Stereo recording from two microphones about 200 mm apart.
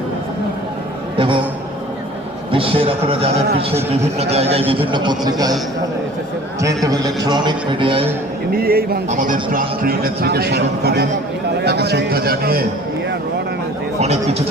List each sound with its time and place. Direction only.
2.5 s a man's voice: 25° right (ahead or behind)
6.8 s a man's voice: 20° right (ahead or behind)
8.5 s speech: 50° right (ahead or behind)
14.0 s speech: 30° right (ahead or behind)